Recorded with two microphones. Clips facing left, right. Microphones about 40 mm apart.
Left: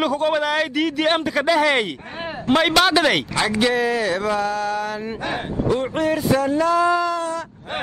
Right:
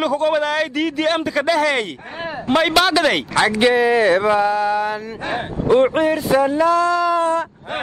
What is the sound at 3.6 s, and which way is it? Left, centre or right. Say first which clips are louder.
Mantra: right 5 dB; centre.